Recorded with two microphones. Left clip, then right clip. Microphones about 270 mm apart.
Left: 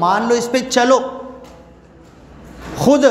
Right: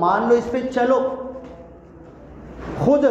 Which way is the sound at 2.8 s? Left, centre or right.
Left.